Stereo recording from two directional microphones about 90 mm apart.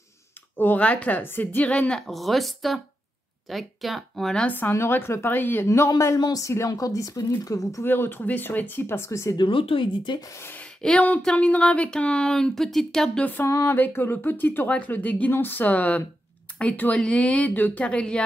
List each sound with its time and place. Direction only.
0.6 s speech: 20° left (ahead or behind)
4.5 s speech: 20° left (ahead or behind)
5.7 s speech: 35° left (ahead or behind)
7.8 s speech: 25° left (ahead or behind)
9.4 s speech: 80° left
10.2 s speech: 30° left (ahead or behind)
10.5 s speech: 10° left (ahead or behind)
13.2 s speech: 20° left (ahead or behind)
13.5 s speech: 35° left (ahead or behind)
13.7 s speech: 25° left (ahead or behind)